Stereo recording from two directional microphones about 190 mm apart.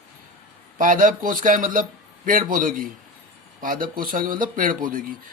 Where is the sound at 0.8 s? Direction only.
45° right (ahead or behind).